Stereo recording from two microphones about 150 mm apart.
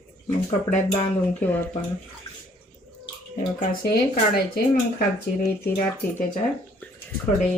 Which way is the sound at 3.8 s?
90° left.